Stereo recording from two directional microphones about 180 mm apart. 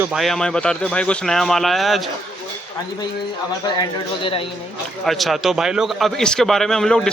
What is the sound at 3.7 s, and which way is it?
Speech, 30° left (ahead or behind).